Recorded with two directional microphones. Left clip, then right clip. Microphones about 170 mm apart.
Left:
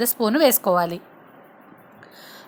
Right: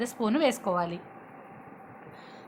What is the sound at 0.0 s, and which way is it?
A woman's voice, 35° left (ahead or behind).